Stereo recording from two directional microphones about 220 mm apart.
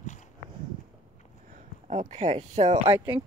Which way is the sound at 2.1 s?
30° right (ahead or behind).